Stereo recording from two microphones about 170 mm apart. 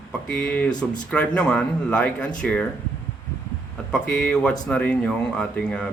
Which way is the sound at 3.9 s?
5° left (ahead or behind).